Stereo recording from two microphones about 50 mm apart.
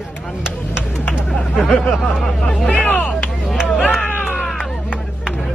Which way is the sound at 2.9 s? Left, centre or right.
Left.